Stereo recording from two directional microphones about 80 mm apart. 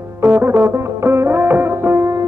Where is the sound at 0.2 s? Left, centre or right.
Right.